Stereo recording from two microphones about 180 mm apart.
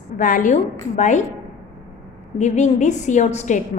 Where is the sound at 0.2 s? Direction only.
45° left (ahead or behind).